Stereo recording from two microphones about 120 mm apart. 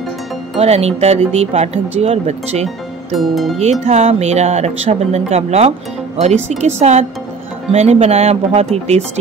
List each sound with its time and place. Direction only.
0.6 s speech: 60° right (ahead or behind)
3.2 s speech: centre (ahead or behind)
3.8 s speech: 60° right (ahead or behind)